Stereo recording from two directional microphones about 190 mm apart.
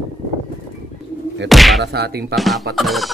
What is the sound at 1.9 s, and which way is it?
Speech, 60° right (ahead or behind).